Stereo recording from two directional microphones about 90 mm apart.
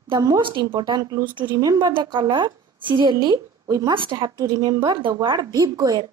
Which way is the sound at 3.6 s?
40° right (ahead or behind).